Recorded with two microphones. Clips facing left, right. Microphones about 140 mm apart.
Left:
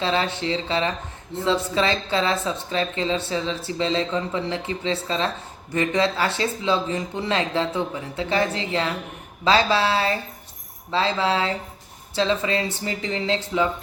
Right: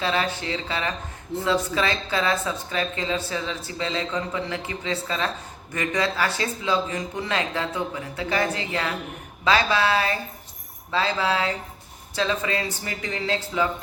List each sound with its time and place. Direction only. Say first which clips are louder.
0.0 s speech: left 2 dB; 25° left (ahead or behind)